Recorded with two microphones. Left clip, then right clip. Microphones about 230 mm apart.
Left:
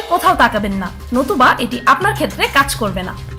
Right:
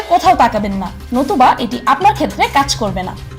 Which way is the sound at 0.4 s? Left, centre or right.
Centre.